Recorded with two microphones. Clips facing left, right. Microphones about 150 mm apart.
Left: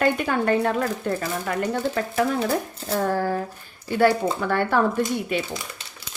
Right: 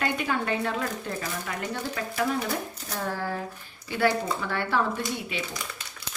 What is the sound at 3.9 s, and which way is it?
Speech, 45° left (ahead or behind).